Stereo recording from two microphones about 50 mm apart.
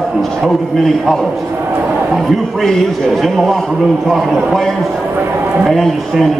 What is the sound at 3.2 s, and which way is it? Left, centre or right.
Speech, centre.